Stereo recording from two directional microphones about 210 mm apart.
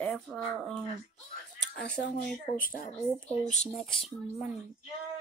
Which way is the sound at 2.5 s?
40° left (ahead or behind).